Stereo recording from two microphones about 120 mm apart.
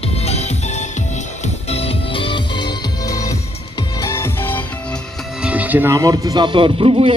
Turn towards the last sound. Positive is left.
turn(degrees=-45)  # may be behind; listen again after turning